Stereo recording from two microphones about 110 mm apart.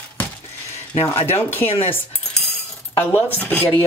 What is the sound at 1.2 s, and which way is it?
Speech, 20° left (ahead or behind).